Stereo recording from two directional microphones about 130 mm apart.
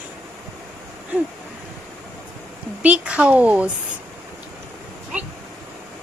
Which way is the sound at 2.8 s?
10° right (ahead or behind).